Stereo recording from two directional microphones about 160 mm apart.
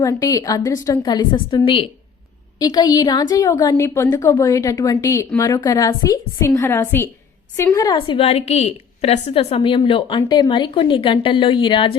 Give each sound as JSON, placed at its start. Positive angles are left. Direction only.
{"t": 0.0, "sound": "a woman's voice", "side_deg": 20}
{"t": 7.9, "sound": "a woman's voice", "side_deg": 30}